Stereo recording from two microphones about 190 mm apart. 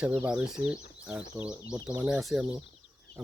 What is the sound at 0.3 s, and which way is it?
Speech, 5° right (ahead or behind).